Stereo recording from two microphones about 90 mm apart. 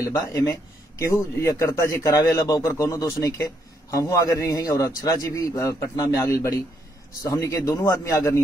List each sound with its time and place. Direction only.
0.0 s a man's voice: 35° left (ahead or behind)